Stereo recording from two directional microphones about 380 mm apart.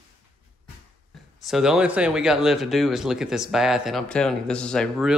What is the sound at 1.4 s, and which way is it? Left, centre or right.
Speech, centre.